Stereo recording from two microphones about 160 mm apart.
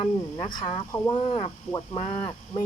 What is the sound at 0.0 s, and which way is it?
Speech, 30° left (ahead or behind).